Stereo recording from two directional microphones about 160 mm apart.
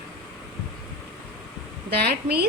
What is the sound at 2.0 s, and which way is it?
Speech, 75° right (ahead or behind).